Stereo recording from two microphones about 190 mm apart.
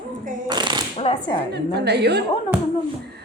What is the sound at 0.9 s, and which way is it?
Speech, 30° left (ahead or behind).